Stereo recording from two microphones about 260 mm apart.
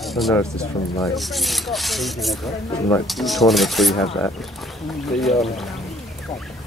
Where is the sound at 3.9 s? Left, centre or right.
Left.